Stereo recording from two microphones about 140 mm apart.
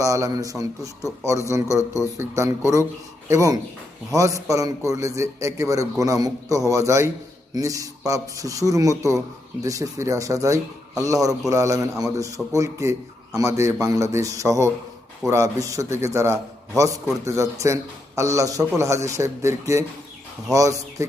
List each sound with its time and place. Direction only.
0.0 s speech: 25° right (ahead or behind)